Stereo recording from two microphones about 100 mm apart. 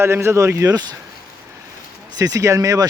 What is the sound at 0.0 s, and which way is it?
Speech, 25° right (ahead or behind).